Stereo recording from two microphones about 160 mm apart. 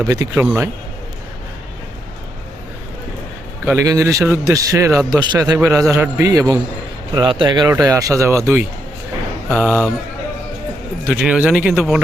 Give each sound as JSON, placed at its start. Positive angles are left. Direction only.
{"t": 0.0, "sound": "a man's voice", "side_deg": -20}
{"t": 3.7, "sound": "a man's voice", "side_deg": -20}
{"t": 7.1, "sound": "a man's voice", "side_deg": -30}
{"t": 11.0, "sound": "speech", "side_deg": -5}